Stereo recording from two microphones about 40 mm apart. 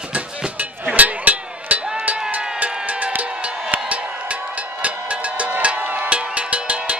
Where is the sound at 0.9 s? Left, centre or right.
Right.